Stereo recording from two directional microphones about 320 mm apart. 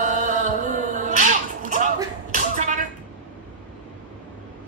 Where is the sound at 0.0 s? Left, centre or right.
Right.